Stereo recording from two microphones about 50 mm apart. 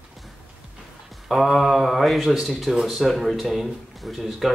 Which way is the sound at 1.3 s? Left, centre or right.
Centre.